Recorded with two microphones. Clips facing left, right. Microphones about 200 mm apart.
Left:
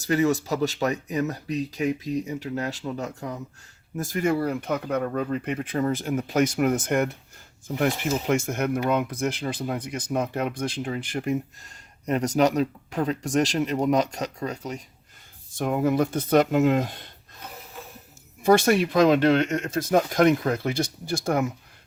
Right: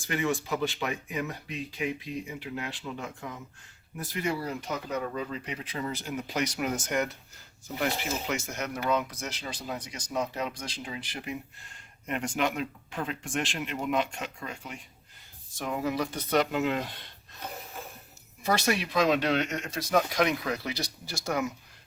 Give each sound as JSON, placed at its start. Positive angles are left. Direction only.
{"t": 0.0, "sound": "speech", "side_deg": 40}
{"t": 15.5, "sound": "speech", "side_deg": 50}
{"t": 18.4, "sound": "speech", "side_deg": 50}